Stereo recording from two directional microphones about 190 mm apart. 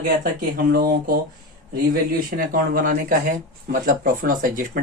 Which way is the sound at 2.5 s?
45° right (ahead or behind).